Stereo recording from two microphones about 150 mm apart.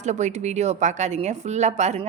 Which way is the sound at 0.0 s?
50° right (ahead or behind).